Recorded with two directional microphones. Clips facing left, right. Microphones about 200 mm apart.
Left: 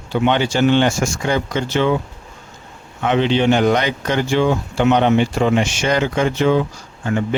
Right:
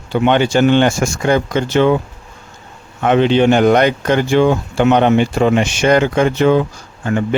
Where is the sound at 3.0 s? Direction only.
50° right (ahead or behind).